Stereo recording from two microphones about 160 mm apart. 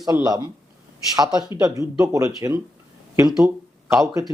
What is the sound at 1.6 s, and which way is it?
Speech, 20° right (ahead or behind).